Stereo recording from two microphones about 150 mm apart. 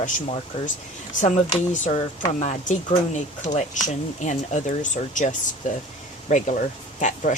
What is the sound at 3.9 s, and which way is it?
Speech, 50° left (ahead or behind).